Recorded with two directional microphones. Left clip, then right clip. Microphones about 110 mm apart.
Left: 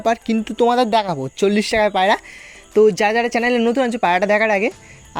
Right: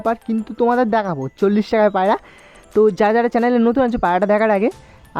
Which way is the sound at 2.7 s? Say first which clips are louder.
Even; 40° right (ahead or behind).